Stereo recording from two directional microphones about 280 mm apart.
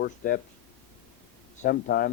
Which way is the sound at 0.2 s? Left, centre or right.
Left.